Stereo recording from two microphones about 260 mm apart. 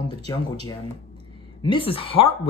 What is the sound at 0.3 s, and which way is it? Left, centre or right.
Speech, centre.